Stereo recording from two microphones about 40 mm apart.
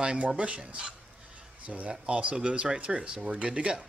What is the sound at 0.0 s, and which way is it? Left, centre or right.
Speech, right.